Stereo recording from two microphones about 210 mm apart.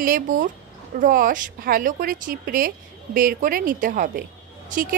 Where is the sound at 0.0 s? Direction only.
40° right (ahead or behind).